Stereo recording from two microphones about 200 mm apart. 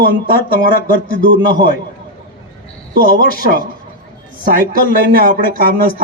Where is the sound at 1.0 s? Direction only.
45° left (ahead or behind).